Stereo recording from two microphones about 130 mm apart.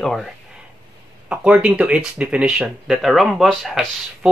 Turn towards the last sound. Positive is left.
turn(degrees=-5)  # may be behind; listen again after turning